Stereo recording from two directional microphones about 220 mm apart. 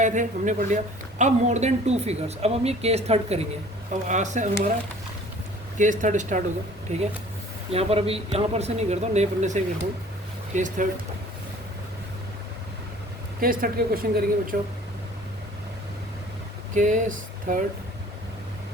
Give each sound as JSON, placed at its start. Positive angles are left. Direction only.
{"t": 0.0, "sound": "a woman's voice", "side_deg": -35}
{"t": 5.7, "sound": "a woman's voice", "side_deg": -35}
{"t": 13.4, "sound": "a woman's voice", "side_deg": -40}
{"t": 16.7, "sound": "a sound", "side_deg": -35}